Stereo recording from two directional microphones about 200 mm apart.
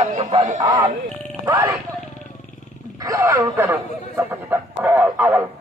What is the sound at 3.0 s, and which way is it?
Speech, 15° right (ahead or behind).